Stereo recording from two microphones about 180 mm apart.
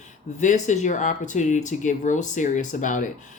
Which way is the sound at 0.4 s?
40° left (ahead or behind).